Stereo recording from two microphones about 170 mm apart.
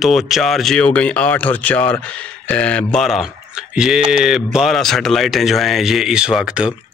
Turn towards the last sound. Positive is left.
turn(degrees=-5)  # may be behind; listen again after turning